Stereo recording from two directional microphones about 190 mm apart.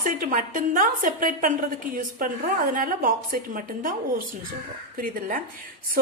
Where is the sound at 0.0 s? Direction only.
45° right (ahead or behind).